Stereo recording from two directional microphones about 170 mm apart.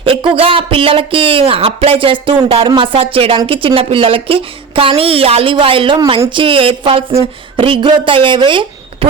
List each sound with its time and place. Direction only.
0.0 s speech: 30° right (ahead or behind)